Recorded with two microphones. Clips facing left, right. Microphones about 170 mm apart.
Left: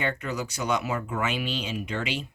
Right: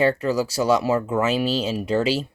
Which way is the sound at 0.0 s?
35° right (ahead or behind).